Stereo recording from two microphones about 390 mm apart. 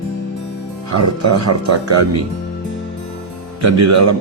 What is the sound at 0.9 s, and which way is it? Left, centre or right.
Speech, right.